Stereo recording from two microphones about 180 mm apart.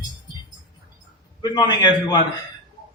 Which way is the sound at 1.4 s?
25° left (ahead or behind).